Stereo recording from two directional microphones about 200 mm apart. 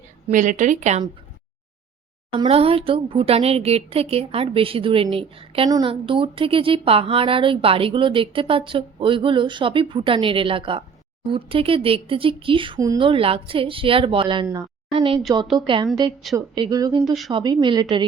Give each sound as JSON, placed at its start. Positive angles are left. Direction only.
{"t": 0.3, "sound": "a woman's voice", "side_deg": -40}
{"t": 2.4, "sound": "a woman's voice", "side_deg": -30}